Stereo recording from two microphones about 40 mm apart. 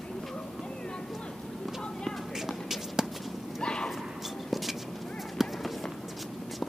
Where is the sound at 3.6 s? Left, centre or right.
Left.